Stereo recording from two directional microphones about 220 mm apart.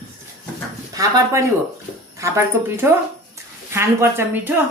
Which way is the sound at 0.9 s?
15° right (ahead or behind).